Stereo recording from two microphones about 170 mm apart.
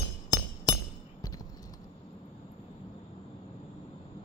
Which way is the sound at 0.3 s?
25° left (ahead or behind).